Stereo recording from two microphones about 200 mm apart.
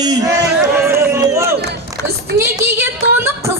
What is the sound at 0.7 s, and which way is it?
Run, 10° right (ahead or behind).